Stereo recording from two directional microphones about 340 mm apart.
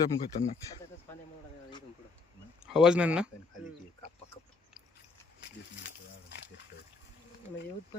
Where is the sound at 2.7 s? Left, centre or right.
Centre.